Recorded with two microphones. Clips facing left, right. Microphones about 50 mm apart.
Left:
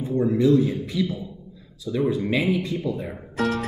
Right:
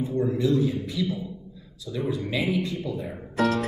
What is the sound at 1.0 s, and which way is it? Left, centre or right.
Speech, left.